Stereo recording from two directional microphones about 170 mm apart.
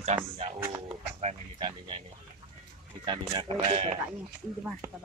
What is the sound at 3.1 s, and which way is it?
Speech, 25° right (ahead or behind).